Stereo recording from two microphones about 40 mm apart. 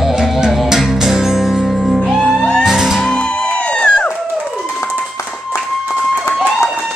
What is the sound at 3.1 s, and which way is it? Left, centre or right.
Music, left.